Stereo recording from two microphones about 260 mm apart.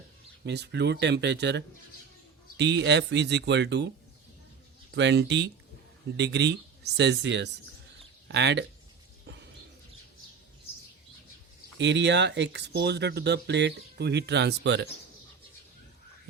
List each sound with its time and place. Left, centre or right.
0.4 s speech: right
4.9 s speech: right
11.8 s speech: right